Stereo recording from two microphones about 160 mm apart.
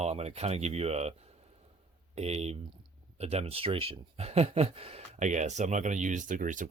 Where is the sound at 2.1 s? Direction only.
40° right (ahead or behind).